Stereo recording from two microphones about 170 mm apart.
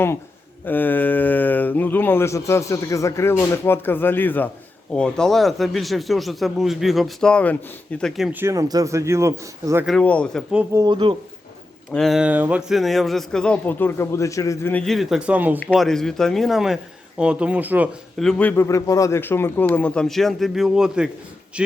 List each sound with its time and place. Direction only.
0.6 s a man's voice: 10° left (ahead or behind); by 9.8 s 15° right (ahead or behind)
9.8 s a man's voice: 5° left (ahead or behind)
10.5 s a man's voice: 5° right (ahead or behind)
10.8 s speech: 30° right (ahead or behind)
11.9 s a man's voice: centre (ahead or behind)
15.6 s a man's voice: centre (ahead or behind)
18.2 s speech: 5° left (ahead or behind)